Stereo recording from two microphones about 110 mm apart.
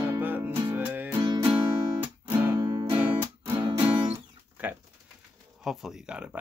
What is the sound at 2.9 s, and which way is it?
Music, 20° right (ahead or behind).